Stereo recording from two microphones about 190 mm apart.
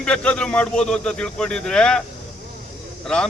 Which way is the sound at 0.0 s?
5° left (ahead or behind).